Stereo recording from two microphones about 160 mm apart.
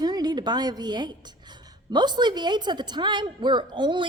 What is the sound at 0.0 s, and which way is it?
A woman's voice, 25° right (ahead or behind).